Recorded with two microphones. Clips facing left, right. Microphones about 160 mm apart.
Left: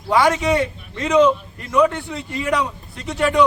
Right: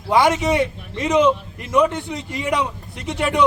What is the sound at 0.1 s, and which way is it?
A man's voice, 20° right (ahead or behind).